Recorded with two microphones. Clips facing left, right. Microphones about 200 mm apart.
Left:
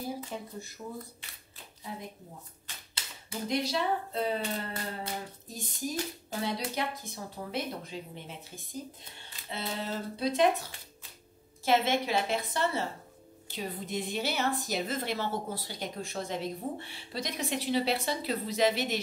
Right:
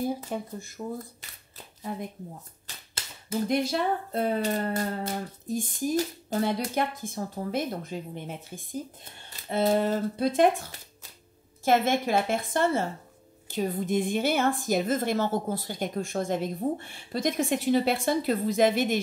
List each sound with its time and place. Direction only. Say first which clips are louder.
0.3 s speech: right 6 dB; 55° right (ahead or behind)
2.6 s a woman's voice: right 3 dB; 45° right (ahead or behind)
11.6 s a woman's voice: right 4 dB; 50° right (ahead or behind)